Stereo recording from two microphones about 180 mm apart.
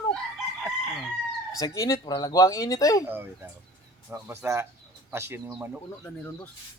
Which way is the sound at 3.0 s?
10° right (ahead or behind).